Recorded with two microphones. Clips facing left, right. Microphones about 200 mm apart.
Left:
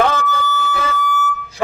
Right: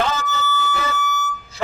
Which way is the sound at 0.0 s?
55° left (ahead or behind).